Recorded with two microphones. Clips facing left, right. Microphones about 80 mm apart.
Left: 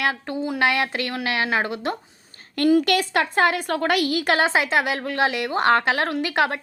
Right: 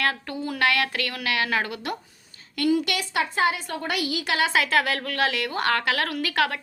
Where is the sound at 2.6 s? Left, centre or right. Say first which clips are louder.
Left 5 dB; left.